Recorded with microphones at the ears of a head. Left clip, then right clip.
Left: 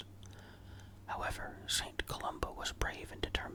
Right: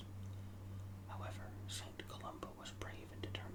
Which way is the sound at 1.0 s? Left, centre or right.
Left.